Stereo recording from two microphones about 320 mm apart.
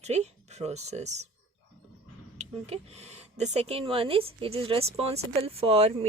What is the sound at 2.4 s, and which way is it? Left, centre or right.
Speech, centre.